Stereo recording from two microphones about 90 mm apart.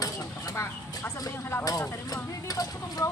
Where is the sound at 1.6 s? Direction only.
40° left (ahead or behind).